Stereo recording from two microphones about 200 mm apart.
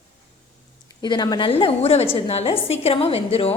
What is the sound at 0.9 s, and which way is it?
A woman's voice, 20° left (ahead or behind).